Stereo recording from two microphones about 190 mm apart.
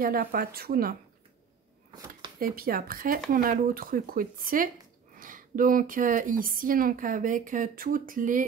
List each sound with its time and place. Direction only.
0.0 s a woman's voice: 50° right (ahead or behind)
2.3 s a woman's voice: 50° right (ahead or behind)